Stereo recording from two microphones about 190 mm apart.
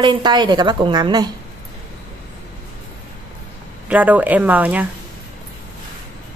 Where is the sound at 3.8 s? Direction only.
10° right (ahead or behind).